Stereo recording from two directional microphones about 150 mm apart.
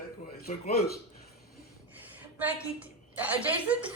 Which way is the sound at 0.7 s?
90° left.